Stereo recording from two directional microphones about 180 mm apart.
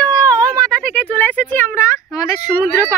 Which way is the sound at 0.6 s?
10° left (ahead or behind).